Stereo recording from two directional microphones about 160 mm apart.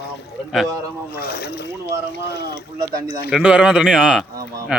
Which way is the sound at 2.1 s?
90° left.